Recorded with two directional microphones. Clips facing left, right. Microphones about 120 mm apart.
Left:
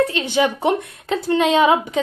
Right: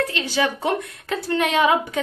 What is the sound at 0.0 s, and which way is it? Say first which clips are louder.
A woman's voice: left 4 dB; 25° left (ahead or behind).